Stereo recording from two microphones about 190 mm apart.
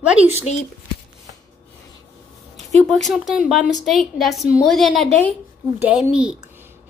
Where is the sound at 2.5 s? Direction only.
Centre (ahead or behind).